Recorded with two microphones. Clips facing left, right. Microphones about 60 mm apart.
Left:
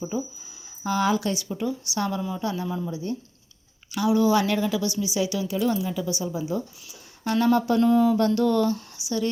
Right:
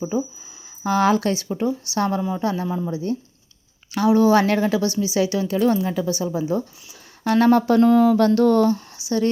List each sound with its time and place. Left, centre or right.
0.9 s a woman's voice: right
2.6 s speech: right
2.9 s a woman's voice: right
8.4 s speech: right